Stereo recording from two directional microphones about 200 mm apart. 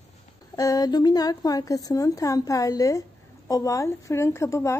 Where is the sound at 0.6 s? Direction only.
20° left (ahead or behind).